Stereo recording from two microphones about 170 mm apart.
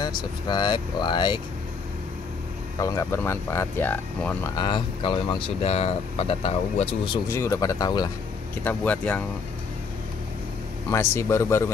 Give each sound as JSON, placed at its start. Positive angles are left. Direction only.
{"t": 0.0, "sound": "speech", "side_deg": 25}
{"t": 2.8, "sound": "speech", "side_deg": 20}
{"t": 4.6, "sound": "speech", "side_deg": 25}
{"t": 7.2, "sound": "speech", "side_deg": 15}
{"t": 8.6, "sound": "speech", "side_deg": 10}
{"t": 10.9, "sound": "speech", "side_deg": 15}